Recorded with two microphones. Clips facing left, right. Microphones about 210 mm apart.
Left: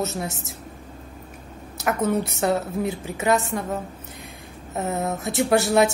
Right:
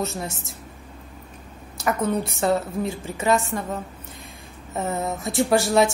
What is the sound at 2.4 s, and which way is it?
Speech, centre (ahead or behind).